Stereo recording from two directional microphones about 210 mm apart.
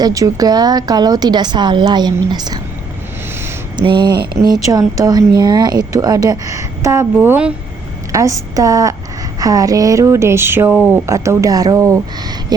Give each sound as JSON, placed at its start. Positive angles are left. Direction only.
{"t": 0.0, "sound": "a woman's voice", "side_deg": -15}
{"t": 3.8, "sound": "a woman's voice", "side_deg": -20}